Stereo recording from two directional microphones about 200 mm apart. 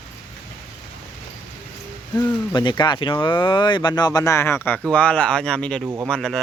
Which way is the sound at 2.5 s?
20° left (ahead or behind).